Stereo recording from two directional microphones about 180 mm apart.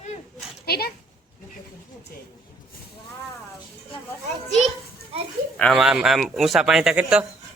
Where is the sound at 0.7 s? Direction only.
60° left (ahead or behind).